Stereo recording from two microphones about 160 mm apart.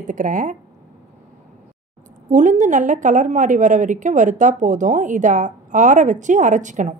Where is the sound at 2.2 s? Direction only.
50° right (ahead or behind).